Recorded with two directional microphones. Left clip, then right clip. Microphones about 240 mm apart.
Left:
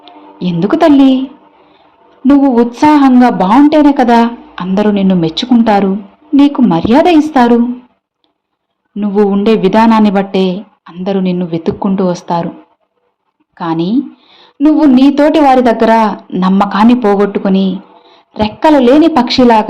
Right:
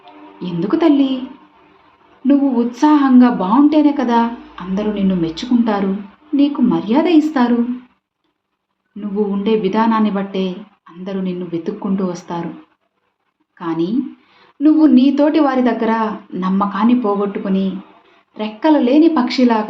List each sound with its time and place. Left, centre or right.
0.0 s a woman's voice: left
2.2 s a woman's voice: left
9.0 s a woman's voice: left
13.6 s a woman's voice: left